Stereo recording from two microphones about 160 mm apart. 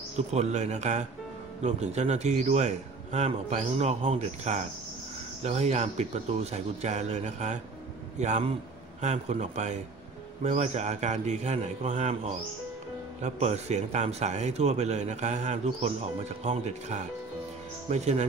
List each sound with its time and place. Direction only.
0.3 s a man's voice: 45° right (ahead or behind)
13.2 s a man's voice: 45° right (ahead or behind)